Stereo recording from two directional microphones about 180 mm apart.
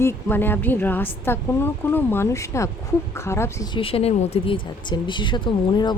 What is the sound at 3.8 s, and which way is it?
Speech, 30° left (ahead or behind).